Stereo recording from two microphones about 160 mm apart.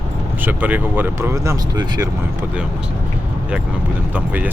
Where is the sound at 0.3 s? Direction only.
10° right (ahead or behind).